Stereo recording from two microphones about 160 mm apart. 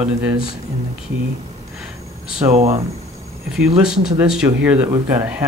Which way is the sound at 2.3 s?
40° right (ahead or behind).